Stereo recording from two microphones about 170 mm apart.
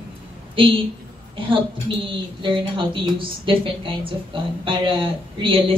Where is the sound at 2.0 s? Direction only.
30° right (ahead or behind).